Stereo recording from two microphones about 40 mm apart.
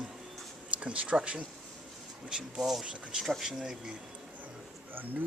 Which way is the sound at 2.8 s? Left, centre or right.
Right.